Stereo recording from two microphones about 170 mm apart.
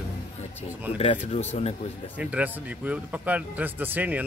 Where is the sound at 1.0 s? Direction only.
35° left (ahead or behind).